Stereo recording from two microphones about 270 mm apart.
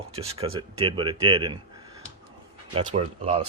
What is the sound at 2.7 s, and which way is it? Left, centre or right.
Speech, right.